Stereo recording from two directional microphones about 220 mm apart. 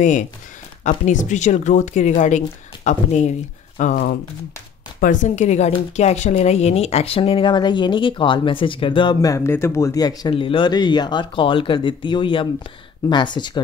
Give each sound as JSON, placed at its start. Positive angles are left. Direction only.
{"t": 0.8, "sound": "speech", "side_deg": 35}
{"t": 5.0, "sound": "speech", "side_deg": 35}